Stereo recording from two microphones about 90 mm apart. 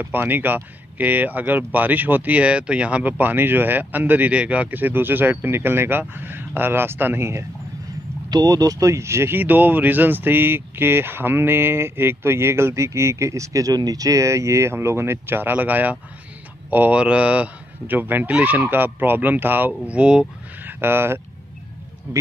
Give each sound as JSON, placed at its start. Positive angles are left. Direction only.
{"t": 0.0, "sound": "speech", "side_deg": -20}
{"t": 8.3, "sound": "speech", "side_deg": -45}
{"t": 20.6, "sound": "speech", "side_deg": -25}